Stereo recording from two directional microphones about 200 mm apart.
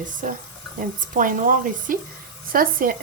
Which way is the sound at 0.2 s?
40° right (ahead or behind).